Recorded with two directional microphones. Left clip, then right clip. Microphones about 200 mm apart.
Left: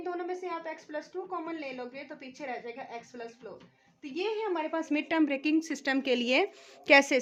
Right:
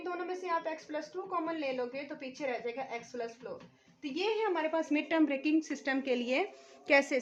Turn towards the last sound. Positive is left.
turn(degrees=45)  # may be behind; listen again after turning